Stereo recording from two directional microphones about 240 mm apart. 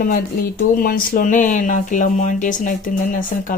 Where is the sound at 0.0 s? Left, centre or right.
Left.